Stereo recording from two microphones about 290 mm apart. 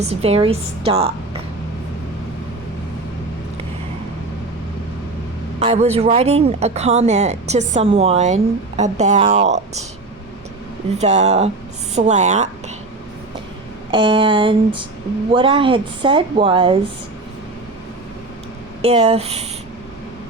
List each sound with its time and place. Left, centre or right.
0.1 s speech: right
5.5 s speech: right
10.9 s speech: right
13.9 s a woman's voice: centre
18.8 s speech: right